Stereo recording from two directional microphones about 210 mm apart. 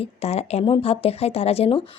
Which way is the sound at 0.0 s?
30° left (ahead or behind).